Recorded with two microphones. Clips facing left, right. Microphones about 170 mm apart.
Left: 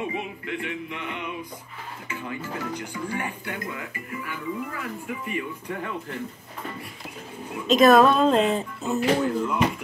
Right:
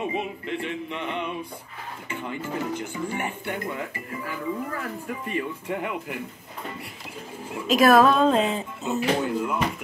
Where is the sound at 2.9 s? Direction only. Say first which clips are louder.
Right 1 dB; 25° right (ahead or behind).